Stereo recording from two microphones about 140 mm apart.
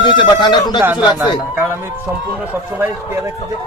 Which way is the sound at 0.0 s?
35° left (ahead or behind).